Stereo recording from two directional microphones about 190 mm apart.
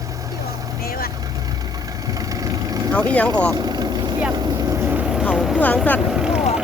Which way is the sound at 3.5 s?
20° right (ahead or behind).